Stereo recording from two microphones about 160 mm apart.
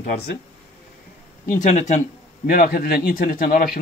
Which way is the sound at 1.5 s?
50° left (ahead or behind).